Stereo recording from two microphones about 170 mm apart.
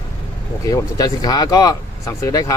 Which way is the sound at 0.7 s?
20° left (ahead or behind).